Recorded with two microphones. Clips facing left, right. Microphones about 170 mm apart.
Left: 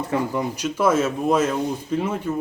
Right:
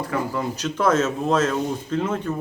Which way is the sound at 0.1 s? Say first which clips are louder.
Left 3 dB; 25° left (ahead or behind).